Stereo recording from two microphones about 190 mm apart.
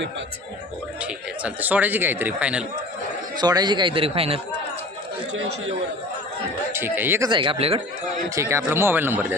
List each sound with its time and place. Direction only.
1.5 s a man's voice: 10° right (ahead or behind)
3.3 s a man's voice: 20° right (ahead or behind)
6.7 s a man's voice: 10° right (ahead or behind)
7.3 s a man's voice: 25° right (ahead or behind)
8.4 s a man's voice: 15° right (ahead or behind)